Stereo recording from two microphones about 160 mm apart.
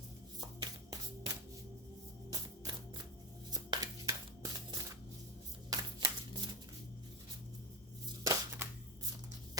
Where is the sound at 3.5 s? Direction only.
25° right (ahead or behind).